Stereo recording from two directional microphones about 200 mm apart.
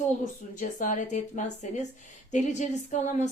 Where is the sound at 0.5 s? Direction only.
40° left (ahead or behind).